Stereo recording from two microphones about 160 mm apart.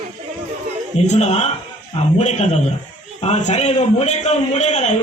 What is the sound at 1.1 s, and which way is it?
A man's voice, 45° left (ahead or behind).